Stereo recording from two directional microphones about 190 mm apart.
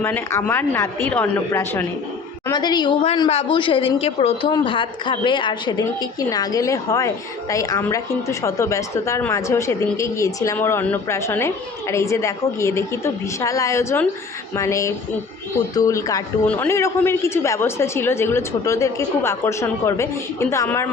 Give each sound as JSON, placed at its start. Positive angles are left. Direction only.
{"t": 0.0, "sound": "a woman's voice", "side_deg": 10}
{"t": 2.5, "sound": "a woman's voice", "side_deg": 20}